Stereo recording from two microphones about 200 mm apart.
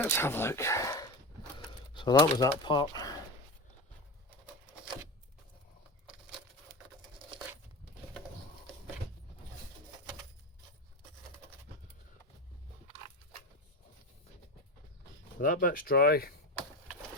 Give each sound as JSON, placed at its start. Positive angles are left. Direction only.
{"t": 0.0, "sound": "speech", "side_deg": 10}
{"t": 15.4, "sound": "speech", "side_deg": 40}